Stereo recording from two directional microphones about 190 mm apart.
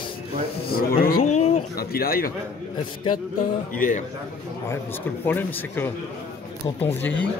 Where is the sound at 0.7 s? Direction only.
50° left (ahead or behind).